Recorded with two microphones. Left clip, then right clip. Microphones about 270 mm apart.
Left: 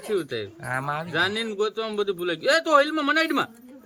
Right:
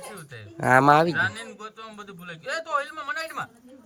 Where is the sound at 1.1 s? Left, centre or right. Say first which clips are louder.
Left 3 dB; left.